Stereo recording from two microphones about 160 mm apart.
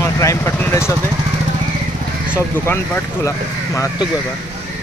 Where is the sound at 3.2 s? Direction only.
20° left (ahead or behind).